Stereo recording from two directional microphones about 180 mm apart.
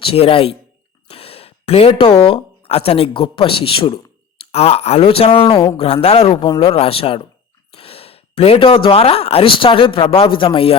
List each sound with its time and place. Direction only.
0.0 s speech: 30° left (ahead or behind)